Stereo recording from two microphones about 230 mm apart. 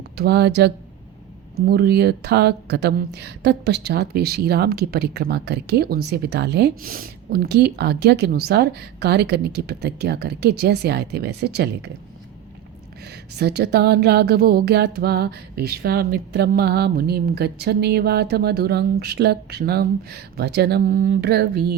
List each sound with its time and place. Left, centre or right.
0.2 s speech: right
13.1 s speech: right